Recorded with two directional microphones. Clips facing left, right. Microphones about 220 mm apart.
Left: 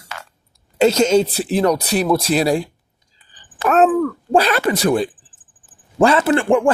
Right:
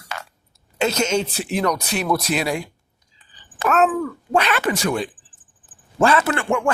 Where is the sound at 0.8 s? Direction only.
30° left (ahead or behind).